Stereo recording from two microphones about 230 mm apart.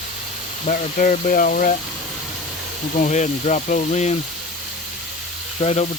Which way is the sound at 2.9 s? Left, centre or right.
Left.